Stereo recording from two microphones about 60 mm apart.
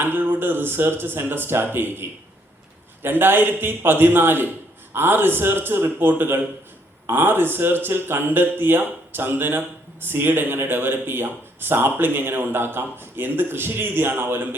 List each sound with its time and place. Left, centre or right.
0.0 s speech: right